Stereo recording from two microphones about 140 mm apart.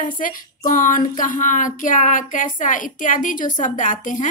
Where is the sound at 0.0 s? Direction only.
75° left (ahead or behind).